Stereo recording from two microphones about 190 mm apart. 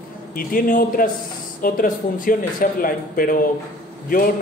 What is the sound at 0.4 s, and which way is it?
A man's voice, 45° left (ahead or behind).